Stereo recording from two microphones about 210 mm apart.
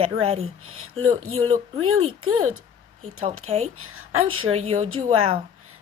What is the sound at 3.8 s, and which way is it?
Speech, 90° right.